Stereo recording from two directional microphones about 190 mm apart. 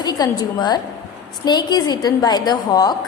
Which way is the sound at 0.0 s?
20° left (ahead or behind).